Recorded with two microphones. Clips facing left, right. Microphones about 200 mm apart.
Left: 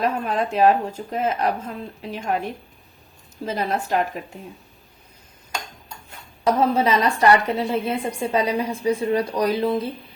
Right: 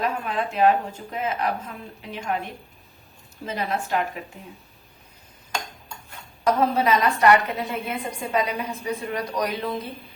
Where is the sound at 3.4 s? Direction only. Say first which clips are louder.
Left 3 dB; 40° left (ahead or behind).